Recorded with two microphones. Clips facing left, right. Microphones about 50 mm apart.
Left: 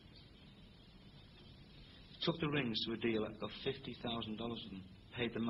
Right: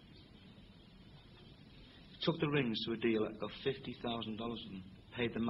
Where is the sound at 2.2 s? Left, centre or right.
Centre.